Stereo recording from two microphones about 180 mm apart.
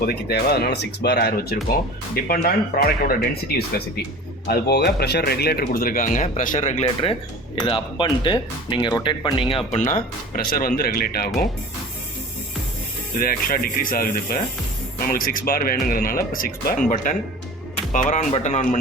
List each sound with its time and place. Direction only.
0.0 s speech: 60° left (ahead or behind)
4.4 s speech: 65° left (ahead or behind); by 9.8 s 30° left (ahead or behind)
9.8 s speech: 50° left (ahead or behind)
13.1 s speech: 55° left (ahead or behind)